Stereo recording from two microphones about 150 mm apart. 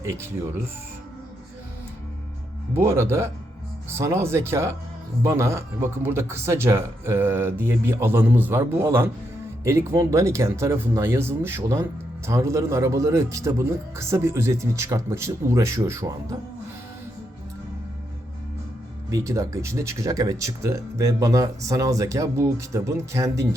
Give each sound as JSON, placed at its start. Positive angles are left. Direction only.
{"t": 0.0, "sound": "speech", "side_deg": -15}
{"t": 2.7, "sound": "speech", "side_deg": -20}
{"t": 19.1, "sound": "speech", "side_deg": -20}